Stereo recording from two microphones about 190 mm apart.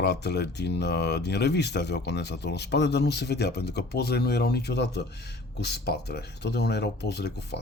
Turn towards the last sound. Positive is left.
turn(degrees=60)  # may be behind; listen again after turning